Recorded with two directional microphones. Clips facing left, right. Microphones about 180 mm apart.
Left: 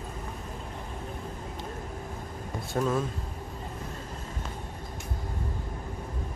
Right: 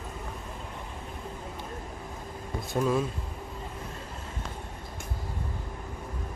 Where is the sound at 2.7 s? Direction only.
10° right (ahead or behind).